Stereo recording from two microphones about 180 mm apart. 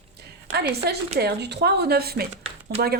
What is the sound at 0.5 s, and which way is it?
A woman's voice, 65° right (ahead or behind).